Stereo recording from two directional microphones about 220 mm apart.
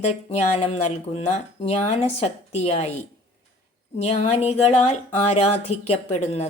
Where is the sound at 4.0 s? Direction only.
30° left (ahead or behind).